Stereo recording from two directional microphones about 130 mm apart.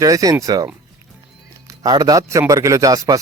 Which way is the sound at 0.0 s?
25° right (ahead or behind).